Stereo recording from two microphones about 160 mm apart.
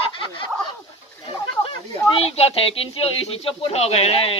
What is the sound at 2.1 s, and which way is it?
Speech, 40° left (ahead or behind).